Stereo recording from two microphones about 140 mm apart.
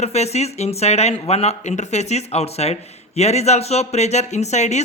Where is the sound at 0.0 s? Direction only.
50° left (ahead or behind).